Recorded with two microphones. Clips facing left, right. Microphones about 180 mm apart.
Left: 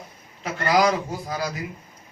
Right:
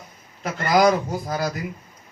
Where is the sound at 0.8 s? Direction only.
45° right (ahead or behind).